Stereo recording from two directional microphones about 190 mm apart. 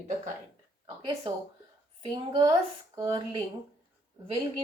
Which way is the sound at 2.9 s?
20° right (ahead or behind).